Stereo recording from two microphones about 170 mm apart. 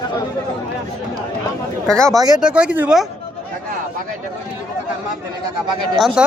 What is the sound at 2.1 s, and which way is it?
Speech, 20° right (ahead or behind).